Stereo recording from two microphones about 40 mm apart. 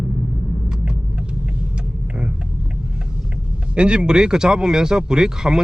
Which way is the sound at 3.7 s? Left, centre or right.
Right.